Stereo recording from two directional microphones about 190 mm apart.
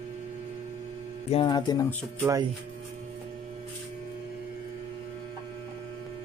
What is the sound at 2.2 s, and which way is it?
Speech, 15° right (ahead or behind).